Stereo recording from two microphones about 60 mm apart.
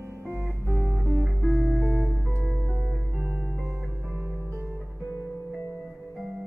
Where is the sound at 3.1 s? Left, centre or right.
Centre.